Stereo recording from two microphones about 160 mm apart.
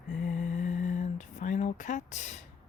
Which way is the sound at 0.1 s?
50° left (ahead or behind).